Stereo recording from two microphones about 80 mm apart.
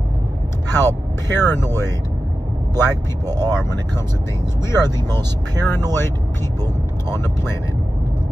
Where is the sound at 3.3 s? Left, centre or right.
Right.